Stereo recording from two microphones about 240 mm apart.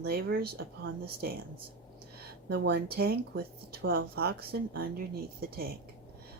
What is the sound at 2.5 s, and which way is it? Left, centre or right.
Speech, right.